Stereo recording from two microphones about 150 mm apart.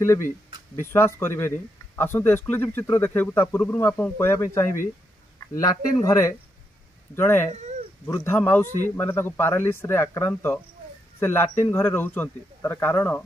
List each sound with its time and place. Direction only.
0.0 s speech: 15° left (ahead or behind)